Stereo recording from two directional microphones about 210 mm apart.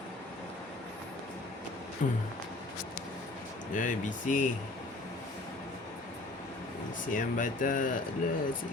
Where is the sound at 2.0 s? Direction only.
40° left (ahead or behind).